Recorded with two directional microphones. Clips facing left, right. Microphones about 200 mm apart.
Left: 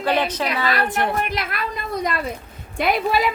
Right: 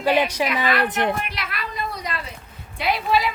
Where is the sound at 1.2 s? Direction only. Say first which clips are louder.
Left 6 dB; 45° left (ahead or behind).